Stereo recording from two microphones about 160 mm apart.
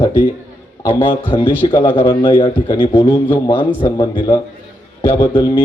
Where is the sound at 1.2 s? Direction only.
30° left (ahead or behind).